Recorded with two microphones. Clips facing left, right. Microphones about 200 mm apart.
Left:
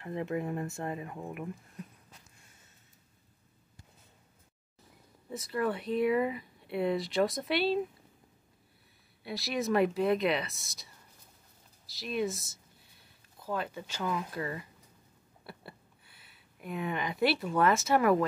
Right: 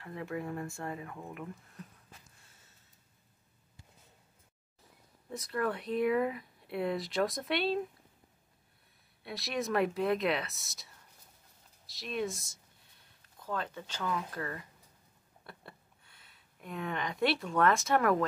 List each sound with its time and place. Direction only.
0.0 s speech: 20° left (ahead or behind)
5.3 s speech: centre (ahead or behind)
9.2 s speech: centre (ahead or behind)
15.4 s a sound: 5° left (ahead or behind)